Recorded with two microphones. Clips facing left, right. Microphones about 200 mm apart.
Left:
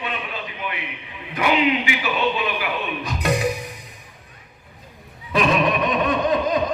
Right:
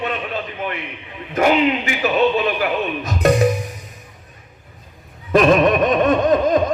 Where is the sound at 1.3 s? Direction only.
45° right (ahead or behind).